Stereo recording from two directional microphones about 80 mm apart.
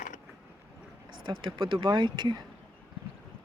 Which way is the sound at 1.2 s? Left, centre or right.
Right.